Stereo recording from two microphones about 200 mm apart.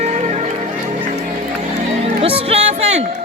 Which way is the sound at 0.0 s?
35° right (ahead or behind).